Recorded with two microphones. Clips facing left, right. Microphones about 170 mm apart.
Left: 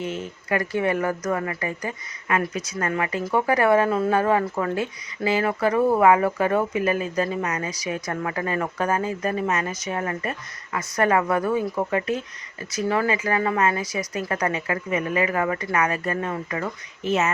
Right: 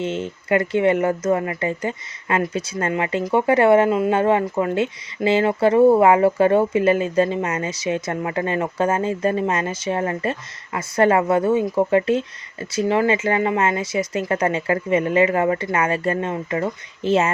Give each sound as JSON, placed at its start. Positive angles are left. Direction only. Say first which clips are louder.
{"t": 0.0, "sound": "speech", "louder": "right 5 dB", "side_deg": -25}